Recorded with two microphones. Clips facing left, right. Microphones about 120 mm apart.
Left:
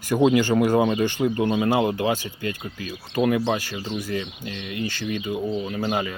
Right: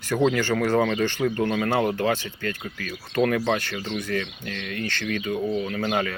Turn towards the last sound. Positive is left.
turn(degrees=5)  # may be behind; listen again after turning